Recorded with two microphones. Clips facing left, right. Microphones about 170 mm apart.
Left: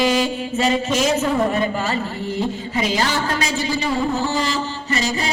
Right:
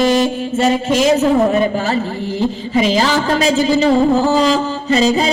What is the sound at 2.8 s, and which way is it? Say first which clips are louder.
A woman's voice: right 5 dB; 90° right.